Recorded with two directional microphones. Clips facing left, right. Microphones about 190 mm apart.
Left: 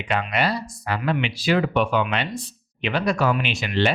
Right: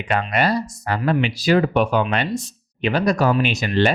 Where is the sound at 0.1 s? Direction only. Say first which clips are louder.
Right 3 dB; 45° right (ahead or behind).